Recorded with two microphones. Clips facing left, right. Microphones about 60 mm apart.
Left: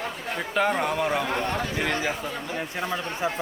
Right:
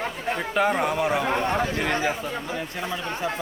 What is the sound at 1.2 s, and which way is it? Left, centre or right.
Speech, centre.